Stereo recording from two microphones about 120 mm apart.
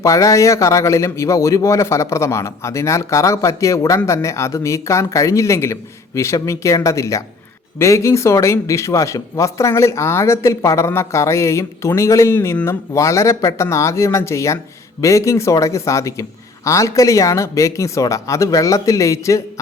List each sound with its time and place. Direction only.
0.0 s speech: 25° left (ahead or behind)